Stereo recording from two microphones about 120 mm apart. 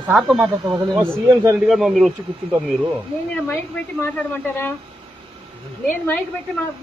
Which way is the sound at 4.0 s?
20° left (ahead or behind).